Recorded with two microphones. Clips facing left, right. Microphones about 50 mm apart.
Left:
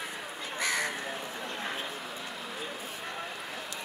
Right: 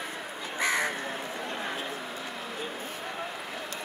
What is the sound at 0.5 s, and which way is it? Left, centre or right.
Crow, right.